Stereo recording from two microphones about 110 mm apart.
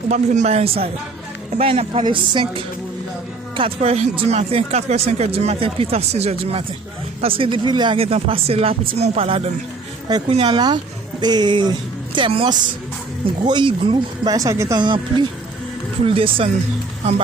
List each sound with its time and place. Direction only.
0.1 s speech: 85° right; by 2.6 s 50° right (ahead or behind)
3.8 s speech: 80° right; by 4.4 s 65° right (ahead or behind)
4.4 s speech: 75° right (ahead or behind); by 7.9 s 45° right (ahead or behind)
7.9 s speech: 60° right (ahead or behind)
10.1 s speech: 40° right (ahead or behind)
10.3 s speech: 50° right (ahead or behind)
14.3 s speech: 30° right (ahead or behind)
14.8 s speech: 45° right (ahead or behind)
16.0 s speech: 60° right (ahead or behind)